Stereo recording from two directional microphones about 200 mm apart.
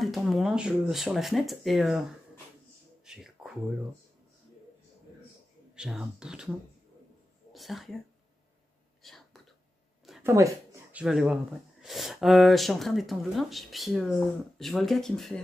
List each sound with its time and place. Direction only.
0.0 s speech: centre (ahead or behind)
3.1 s a sound: centre (ahead or behind)
5.8 s speech: 5° right (ahead or behind)
7.5 s speech: centre (ahead or behind)
9.0 s whispering: centre (ahead or behind)
10.2 s speech: 15° right (ahead or behind); by 15.4 s centre (ahead or behind)